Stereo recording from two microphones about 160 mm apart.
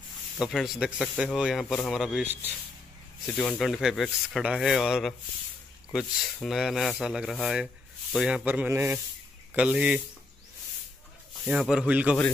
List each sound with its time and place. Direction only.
0.4 s speech: centre (ahead or behind)
3.3 s speech: 5° left (ahead or behind)
11.4 s speech: 5° right (ahead or behind)